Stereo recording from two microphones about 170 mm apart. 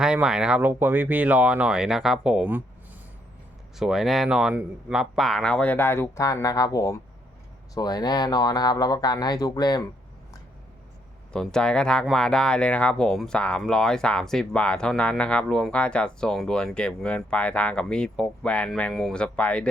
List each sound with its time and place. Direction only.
0.0 s speech: 5° right (ahead or behind)
3.8 s speech: centre (ahead or behind); by 9.8 s 25° left (ahead or behind)
11.3 s speech: 5° left (ahead or behind)